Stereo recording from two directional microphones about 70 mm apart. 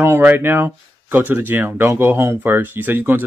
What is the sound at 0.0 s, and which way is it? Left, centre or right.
Speech, right.